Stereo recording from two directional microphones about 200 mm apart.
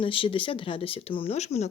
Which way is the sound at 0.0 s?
25° left (ahead or behind).